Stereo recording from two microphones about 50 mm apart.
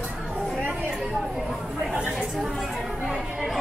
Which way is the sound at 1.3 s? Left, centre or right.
Centre.